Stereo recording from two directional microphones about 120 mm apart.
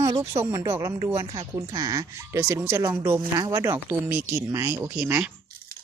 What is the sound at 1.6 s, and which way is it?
Speech, 30° right (ahead or behind).